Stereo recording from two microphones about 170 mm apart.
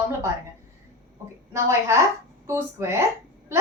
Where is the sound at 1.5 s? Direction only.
15° right (ahead or behind).